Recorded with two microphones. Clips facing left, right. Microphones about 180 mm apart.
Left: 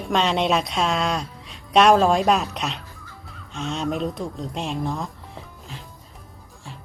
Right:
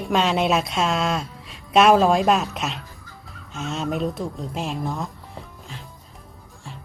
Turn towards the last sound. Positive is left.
turn(degrees=0)  # may be behind; listen again after turning